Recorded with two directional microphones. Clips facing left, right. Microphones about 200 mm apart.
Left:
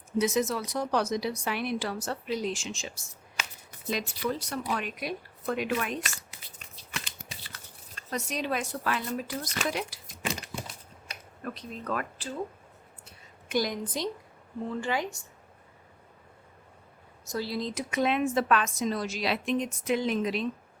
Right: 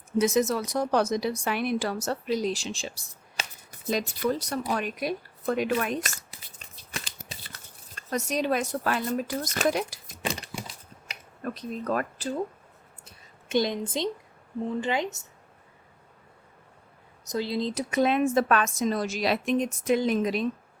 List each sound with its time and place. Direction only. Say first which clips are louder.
0.2 s a woman's voice: right 3 dB; 45° right (ahead or behind)
6.9 s a sound: right 2 dB; 35° right (ahead or behind)
7.9 s a woman's voice: right 5 dB; 40° right (ahead or behind)
11.4 s speech: right 5 dB; 40° right (ahead or behind)
13.5 s a woman's voice: right 3 dB; 25° right (ahead or behind)
17.2 s a woman's voice: right 4 dB; 20° right (ahead or behind); by 20.5 s 45° right (ahead or behind)